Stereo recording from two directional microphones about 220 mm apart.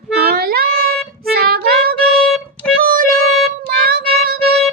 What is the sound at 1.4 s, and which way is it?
Music, 45° right (ahead or behind).